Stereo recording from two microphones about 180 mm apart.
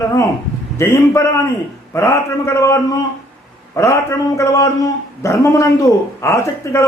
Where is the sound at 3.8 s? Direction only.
15° left (ahead or behind).